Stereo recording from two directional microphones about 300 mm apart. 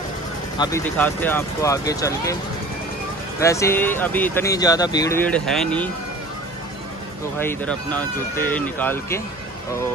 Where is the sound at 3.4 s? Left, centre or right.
Centre.